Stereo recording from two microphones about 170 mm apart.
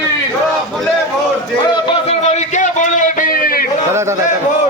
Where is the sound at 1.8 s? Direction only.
40° left (ahead or behind); by 3.7 s 60° left (ahead or behind).